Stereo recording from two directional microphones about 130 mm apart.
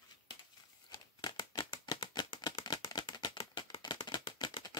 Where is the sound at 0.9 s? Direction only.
30° left (ahead or behind).